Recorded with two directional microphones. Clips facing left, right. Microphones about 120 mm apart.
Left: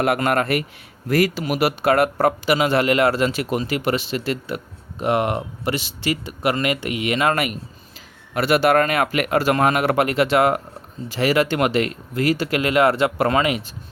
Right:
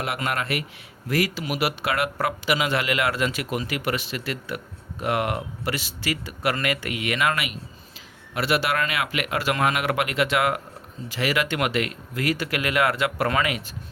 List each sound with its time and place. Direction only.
0.0 s speech: 50° left (ahead or behind); by 7.3 s 30° left (ahead or behind)
7.3 s speech: 45° left (ahead or behind); by 13.7 s 25° left (ahead or behind)